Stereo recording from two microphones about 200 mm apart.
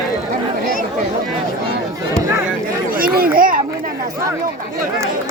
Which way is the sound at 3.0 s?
50° right (ahead or behind).